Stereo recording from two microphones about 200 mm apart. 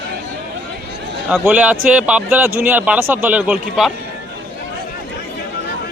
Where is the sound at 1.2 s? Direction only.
5° right (ahead or behind).